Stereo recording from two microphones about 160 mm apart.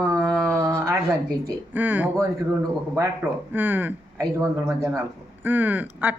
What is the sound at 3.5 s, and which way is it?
Speech, 10° right (ahead or behind).